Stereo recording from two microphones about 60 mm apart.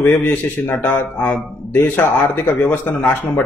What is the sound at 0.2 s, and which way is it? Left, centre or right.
Speech, left.